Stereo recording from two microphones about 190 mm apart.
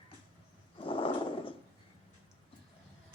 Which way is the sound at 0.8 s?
25° left (ahead or behind).